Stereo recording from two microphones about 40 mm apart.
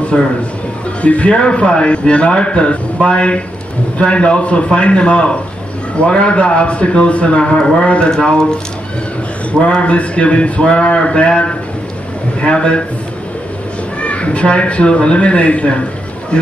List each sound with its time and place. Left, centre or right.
0.1 s a man's voice: left
9.5 s a man's voice: left
14.0 s a man's voice: left